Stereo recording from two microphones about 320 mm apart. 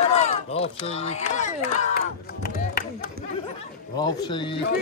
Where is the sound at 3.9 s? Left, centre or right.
Centre.